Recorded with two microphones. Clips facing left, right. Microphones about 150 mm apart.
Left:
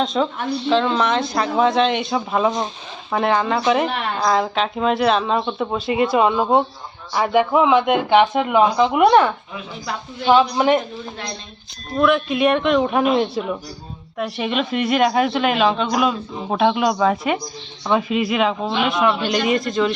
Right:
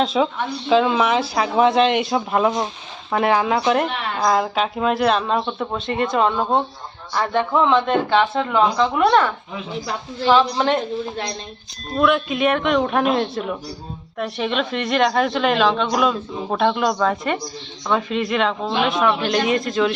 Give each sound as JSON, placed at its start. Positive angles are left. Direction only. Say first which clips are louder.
{"t": 0.0, "sound": "speech", "louder": "right 1 dB", "side_deg": -5}
{"t": 11.9, "sound": "speech", "louder": "left 1 dB", "side_deg": 0}